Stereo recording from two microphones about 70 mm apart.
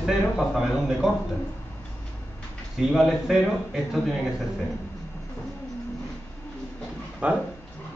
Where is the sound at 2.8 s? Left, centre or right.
Centre.